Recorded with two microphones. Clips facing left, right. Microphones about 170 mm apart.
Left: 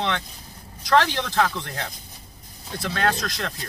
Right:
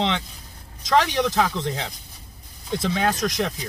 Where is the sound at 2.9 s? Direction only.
15° right (ahead or behind).